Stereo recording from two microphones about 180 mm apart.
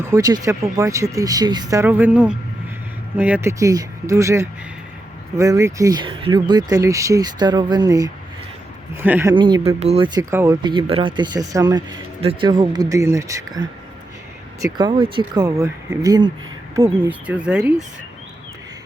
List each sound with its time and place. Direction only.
0.1 s speech: 20° right (ahead or behind)
9.3 s speech: 25° right (ahead or behind)
10.2 s speech: 20° right (ahead or behind)